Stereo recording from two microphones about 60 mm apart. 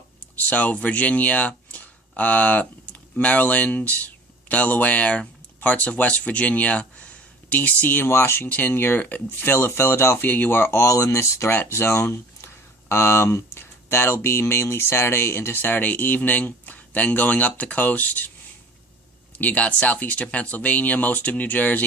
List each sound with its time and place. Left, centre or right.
0.3 s speech: left
8.0 s speech: left
8.4 s speech: left
11.5 s speech: left
19.4 s speech: left